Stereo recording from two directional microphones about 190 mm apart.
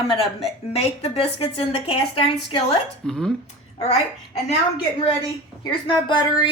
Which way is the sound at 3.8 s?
35° left (ahead or behind).